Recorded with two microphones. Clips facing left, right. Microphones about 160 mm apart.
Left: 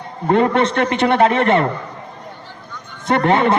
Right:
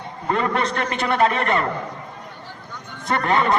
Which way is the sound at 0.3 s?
30° left (ahead or behind).